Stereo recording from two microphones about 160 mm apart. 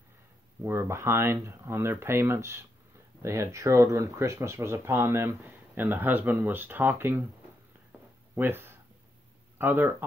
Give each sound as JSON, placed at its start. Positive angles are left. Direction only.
{"t": 0.7, "sound": "speech", "side_deg": -15}
{"t": 8.4, "sound": "speech", "side_deg": -15}